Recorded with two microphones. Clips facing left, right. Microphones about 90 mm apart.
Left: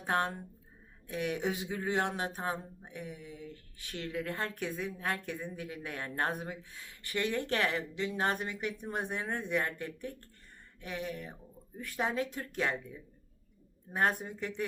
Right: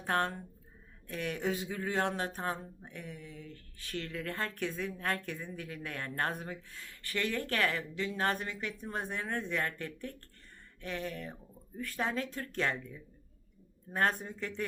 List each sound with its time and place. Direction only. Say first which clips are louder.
0.0 s speech: even; 15° left (ahead or behind)